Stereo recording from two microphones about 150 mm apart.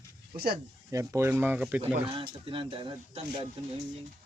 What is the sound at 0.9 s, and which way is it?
Speech, 20° right (ahead or behind).